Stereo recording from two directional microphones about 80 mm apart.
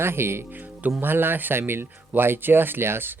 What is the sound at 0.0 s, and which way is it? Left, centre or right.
Speech, right.